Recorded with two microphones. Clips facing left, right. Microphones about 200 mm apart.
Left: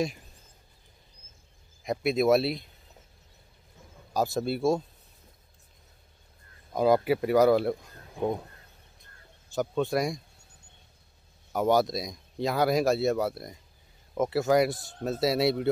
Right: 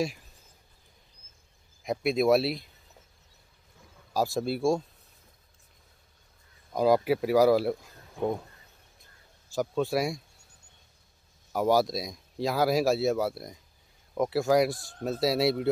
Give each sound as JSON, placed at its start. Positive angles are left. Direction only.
{"t": 1.8, "sound": "speech", "side_deg": 0}
{"t": 4.1, "sound": "speech", "side_deg": 0}
{"t": 6.7, "sound": "speech", "side_deg": 0}
{"t": 9.5, "sound": "speech", "side_deg": 0}
{"t": 11.5, "sound": "speech", "side_deg": 0}
{"t": 14.8, "sound": "speech", "side_deg": 20}
{"t": 15.0, "sound": "speech", "side_deg": 0}